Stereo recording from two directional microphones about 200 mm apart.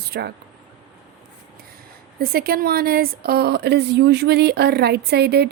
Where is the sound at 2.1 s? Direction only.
50° right (ahead or behind).